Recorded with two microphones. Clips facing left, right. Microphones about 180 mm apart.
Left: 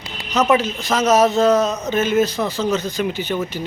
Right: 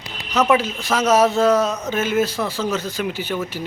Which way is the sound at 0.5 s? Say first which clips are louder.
Left 1 dB; 10° right (ahead or behind).